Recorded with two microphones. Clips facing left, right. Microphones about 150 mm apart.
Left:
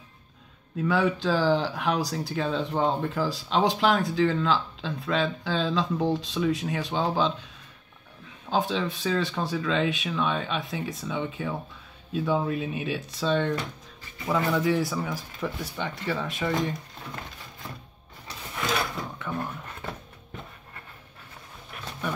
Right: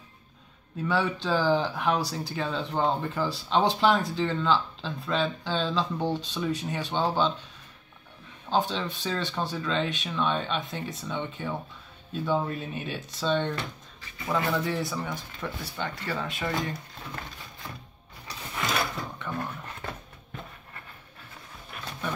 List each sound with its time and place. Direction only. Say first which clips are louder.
0.8 s speech: left 3 dB; centre (ahead or behind)
8.5 s speech: left 1 dB; centre (ahead or behind)
19.1 s a sound: left 1 dB; 5° left (ahead or behind)